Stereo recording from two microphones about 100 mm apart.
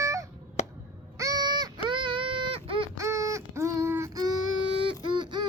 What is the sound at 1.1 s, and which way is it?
Crow, 35° right (ahead or behind).